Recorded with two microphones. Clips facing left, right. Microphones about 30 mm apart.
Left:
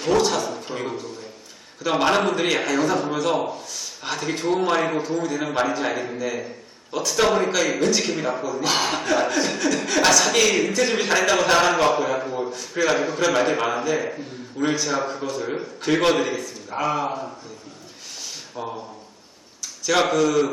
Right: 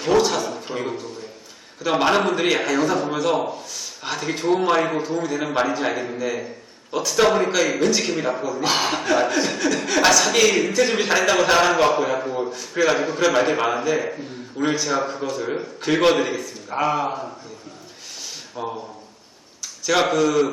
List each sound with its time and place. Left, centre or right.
0.0 s a sound: centre
1.8 s a man's voice: centre
18.5 s a man's voice: centre